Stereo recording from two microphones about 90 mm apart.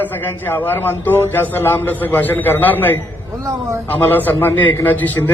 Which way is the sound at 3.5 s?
30° right (ahead or behind).